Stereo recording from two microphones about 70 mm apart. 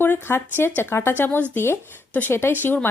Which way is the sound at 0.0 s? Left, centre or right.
Left.